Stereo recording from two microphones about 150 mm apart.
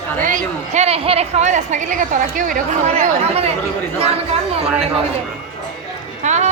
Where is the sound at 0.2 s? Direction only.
65° right (ahead or behind).